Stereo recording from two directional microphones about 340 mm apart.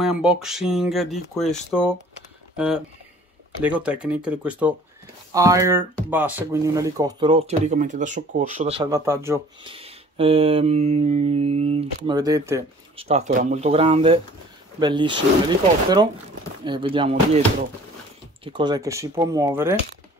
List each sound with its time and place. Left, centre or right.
0.0 s speech: centre
2.5 s speech: centre
16.6 s speech: centre
18.4 s speech: centre